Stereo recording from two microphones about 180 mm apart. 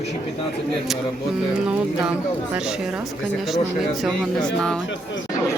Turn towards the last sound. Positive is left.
turn(degrees=5)  # may be behind; listen again after turning